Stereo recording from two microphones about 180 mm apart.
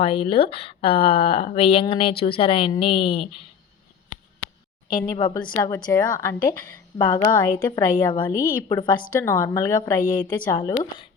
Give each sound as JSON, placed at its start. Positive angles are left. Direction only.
{"t": 0.0, "sound": "speech", "side_deg": 30}
{"t": 4.9, "sound": "a woman's voice", "side_deg": 25}